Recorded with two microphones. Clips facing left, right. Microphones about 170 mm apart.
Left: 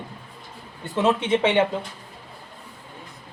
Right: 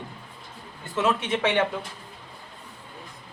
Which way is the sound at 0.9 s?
30° left (ahead or behind).